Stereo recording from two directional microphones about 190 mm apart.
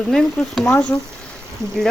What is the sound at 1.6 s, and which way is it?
Speech, 15° right (ahead or behind).